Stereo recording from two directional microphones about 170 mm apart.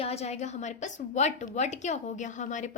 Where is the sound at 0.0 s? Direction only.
40° left (ahead or behind).